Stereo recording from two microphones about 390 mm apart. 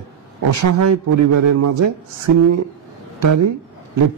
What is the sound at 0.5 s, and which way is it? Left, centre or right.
A man's voice, right.